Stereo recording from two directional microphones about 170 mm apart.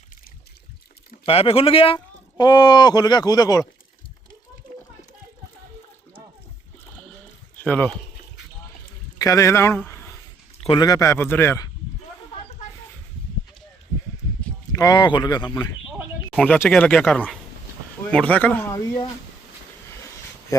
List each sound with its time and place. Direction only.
1.2 s speech: 35° left (ahead or behind)
7.6 s speech: 5° left (ahead or behind)
9.1 s a man's voice: 20° left (ahead or behind)
9.8 s a sound: 15° left (ahead or behind)
10.6 s a man's voice: 25° left (ahead or behind)
14.7 s speech: 20° left (ahead or behind)
16.0 s a sound: 5° right (ahead or behind)
16.5 s a man's voice: 10° left (ahead or behind)
20.5 s speech: 20° left (ahead or behind)